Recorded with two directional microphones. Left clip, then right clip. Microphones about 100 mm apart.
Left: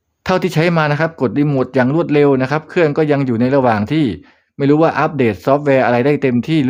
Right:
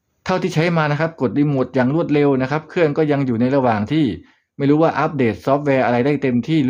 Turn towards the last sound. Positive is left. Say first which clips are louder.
# left 3 dB
turn(degrees=50)  # may be behind; listen again after turning